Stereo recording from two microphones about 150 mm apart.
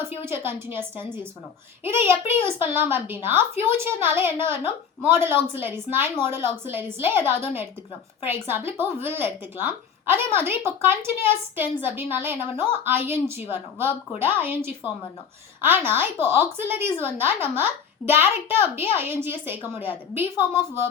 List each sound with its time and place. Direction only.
0.2 s a woman's voice: 15° right (ahead or behind)